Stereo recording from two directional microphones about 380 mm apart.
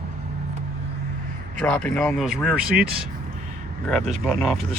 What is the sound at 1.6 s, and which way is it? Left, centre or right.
Speech, centre.